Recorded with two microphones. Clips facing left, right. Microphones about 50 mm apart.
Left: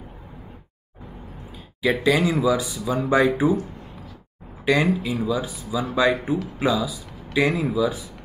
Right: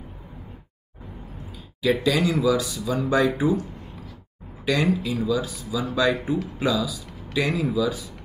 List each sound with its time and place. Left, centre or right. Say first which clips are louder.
1.8 s speech: left 2 dB; left
4.6 s speech: left 2 dB; left